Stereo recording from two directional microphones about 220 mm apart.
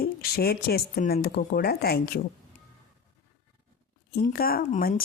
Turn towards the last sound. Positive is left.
turn(degrees=40)  # may be behind; listen again after turning